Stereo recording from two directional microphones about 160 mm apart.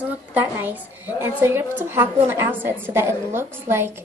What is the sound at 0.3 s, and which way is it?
Speech, 15° right (ahead or behind).